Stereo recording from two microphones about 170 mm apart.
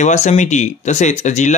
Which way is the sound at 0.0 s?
40° left (ahead or behind).